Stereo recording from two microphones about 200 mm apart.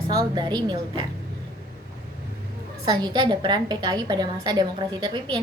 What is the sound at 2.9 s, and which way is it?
A woman's voice, 20° right (ahead or behind).